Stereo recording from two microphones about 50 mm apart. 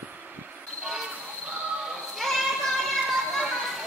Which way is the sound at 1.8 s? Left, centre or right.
Centre.